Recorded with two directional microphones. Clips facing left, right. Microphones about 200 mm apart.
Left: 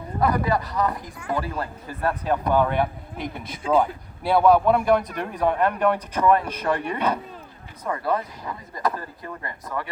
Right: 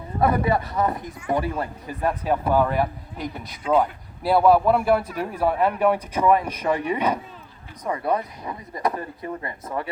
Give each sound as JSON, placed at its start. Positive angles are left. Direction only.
{"t": 0.2, "sound": "a man's voice", "side_deg": -25}